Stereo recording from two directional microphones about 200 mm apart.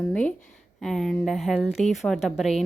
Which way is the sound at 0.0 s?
5° left (ahead or behind).